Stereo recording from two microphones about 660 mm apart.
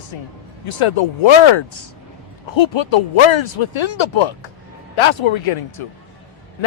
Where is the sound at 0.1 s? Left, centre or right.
Left.